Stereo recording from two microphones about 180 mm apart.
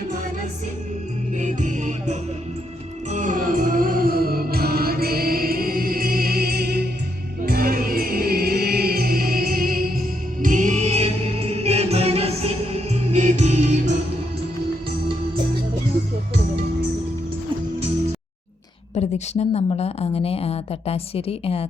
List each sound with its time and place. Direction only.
1.4 s music: 40° right (ahead or behind)
18.9 s speech: 35° left (ahead or behind)